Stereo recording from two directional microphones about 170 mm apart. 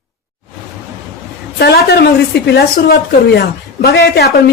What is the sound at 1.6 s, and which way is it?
A woman's voice, 70° left (ahead or behind).